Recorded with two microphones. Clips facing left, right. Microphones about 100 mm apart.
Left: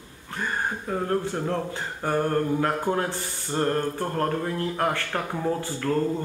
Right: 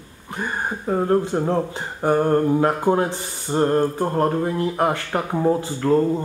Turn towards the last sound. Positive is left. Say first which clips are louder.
# right 6 dB
turn(degrees=-20)  # may be behind; listen again after turning